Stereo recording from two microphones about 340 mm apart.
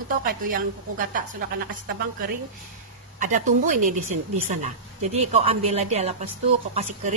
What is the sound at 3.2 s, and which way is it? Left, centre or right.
A woman's voice, right.